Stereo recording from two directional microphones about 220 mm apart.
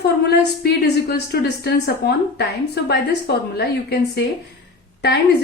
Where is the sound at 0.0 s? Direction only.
45° left (ahead or behind).